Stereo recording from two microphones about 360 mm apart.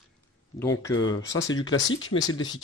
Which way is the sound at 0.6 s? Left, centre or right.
Centre.